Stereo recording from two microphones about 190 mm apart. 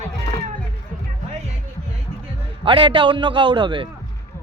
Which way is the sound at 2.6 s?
25° right (ahead or behind).